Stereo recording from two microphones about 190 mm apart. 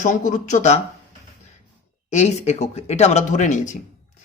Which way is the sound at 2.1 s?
35° left (ahead or behind).